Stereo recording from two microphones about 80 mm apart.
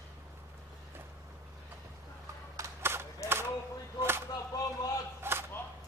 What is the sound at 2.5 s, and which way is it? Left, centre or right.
Single-lens reflex camera, right.